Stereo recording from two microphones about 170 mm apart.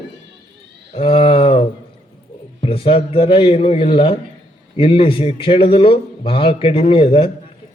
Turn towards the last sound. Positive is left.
turn(degrees=35)  # may be behind; listen again after turning